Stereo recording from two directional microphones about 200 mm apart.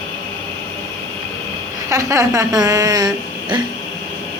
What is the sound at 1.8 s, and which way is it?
Speech, 15° right (ahead or behind).